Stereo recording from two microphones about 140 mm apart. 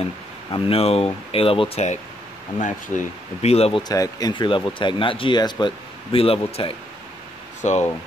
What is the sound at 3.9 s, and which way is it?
Speech, 25° left (ahead or behind).